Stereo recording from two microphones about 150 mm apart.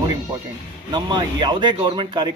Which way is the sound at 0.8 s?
30° right (ahead or behind).